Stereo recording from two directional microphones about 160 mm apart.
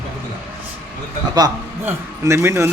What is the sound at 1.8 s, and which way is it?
Speech, 15° right (ahead or behind).